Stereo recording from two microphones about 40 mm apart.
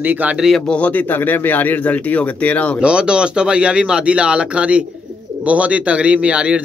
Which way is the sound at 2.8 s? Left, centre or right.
Right.